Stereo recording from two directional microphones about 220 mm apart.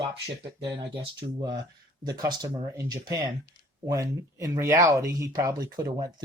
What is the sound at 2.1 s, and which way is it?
Speech, 20° right (ahead or behind).